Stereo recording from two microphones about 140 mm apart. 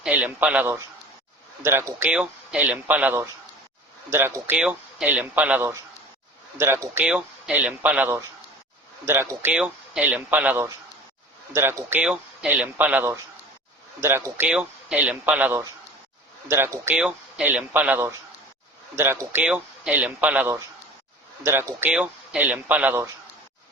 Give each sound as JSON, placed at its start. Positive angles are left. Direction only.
{"t": 0.0, "sound": "a man's voice", "side_deg": -10}
{"t": 16.9, "sound": "a man's voice", "side_deg": -5}